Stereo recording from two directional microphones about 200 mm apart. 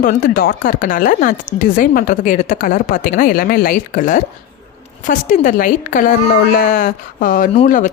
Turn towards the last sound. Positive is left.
turn(degrees=40)  # may be behind; listen again after turning